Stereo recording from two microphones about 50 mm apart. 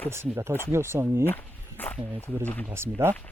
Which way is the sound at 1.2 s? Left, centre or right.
Left.